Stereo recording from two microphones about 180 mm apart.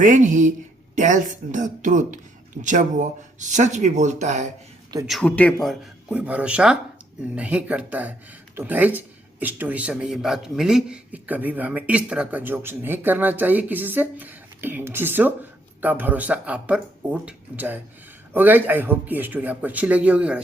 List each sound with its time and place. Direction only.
0.0 s speech: 45° right (ahead or behind)
5.0 s speech: 5° left (ahead or behind)